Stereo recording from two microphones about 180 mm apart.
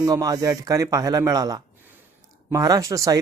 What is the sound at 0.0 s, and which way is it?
A man's voice, 20° right (ahead or behind).